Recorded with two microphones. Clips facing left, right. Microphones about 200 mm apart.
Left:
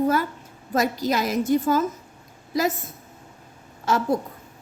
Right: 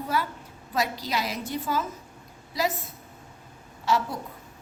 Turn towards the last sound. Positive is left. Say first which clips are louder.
# left 2 dB
turn(degrees=45)  # may be behind; listen again after turning